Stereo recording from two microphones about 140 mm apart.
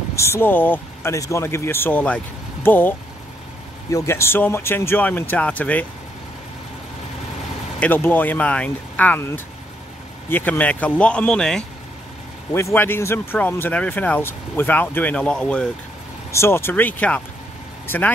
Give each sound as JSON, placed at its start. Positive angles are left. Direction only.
{"t": 0.1, "sound": "speech", "side_deg": 20}
{"t": 3.9, "sound": "speech", "side_deg": 20}
{"t": 7.8, "sound": "speech", "side_deg": 15}
{"t": 12.5, "sound": "speech", "side_deg": 15}
{"t": 16.3, "sound": "speech", "side_deg": 20}